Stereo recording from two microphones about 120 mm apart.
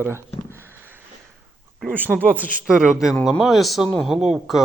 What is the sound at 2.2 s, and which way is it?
A man's voice, 15° right (ahead or behind).